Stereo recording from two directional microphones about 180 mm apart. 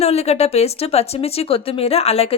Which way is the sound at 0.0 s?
35° left (ahead or behind).